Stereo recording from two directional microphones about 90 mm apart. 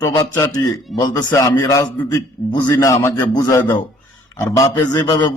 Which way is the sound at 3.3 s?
45° left (ahead or behind).